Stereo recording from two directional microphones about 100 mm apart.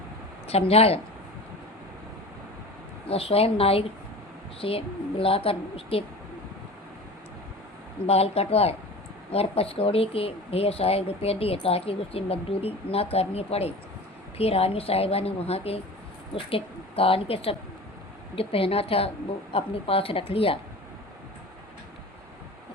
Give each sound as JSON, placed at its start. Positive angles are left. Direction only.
{"t": 0.4, "sound": "a woman's voice", "side_deg": 90}
{"t": 3.1, "sound": "a woman's voice", "side_deg": 75}
{"t": 8.0, "sound": "a woman's voice", "side_deg": 90}
{"t": 9.3, "sound": "speech", "side_deg": 80}
{"t": 16.3, "sound": "a woman's voice", "side_deg": 70}